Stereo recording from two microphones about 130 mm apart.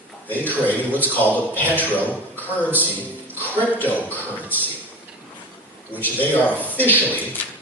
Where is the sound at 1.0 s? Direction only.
15° left (ahead or behind).